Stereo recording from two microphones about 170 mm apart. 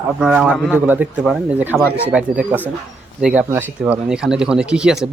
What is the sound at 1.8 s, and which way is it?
Speech, 15° left (ahead or behind).